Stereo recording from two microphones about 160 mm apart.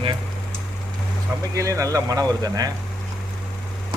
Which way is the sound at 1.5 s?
20° right (ahead or behind).